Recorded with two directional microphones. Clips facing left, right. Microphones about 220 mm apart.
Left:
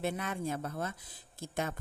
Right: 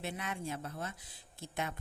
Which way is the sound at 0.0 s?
50° left (ahead or behind).